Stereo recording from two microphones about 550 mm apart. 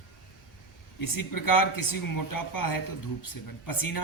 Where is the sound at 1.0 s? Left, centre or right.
Left.